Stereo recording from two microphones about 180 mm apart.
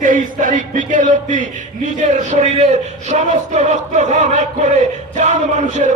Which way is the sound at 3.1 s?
40° right (ahead or behind).